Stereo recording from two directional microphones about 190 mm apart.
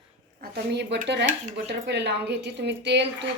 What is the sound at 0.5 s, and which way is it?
A woman's voice, 60° right (ahead or behind).